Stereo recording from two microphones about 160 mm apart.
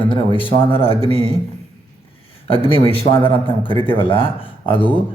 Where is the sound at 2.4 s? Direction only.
35° left (ahead or behind).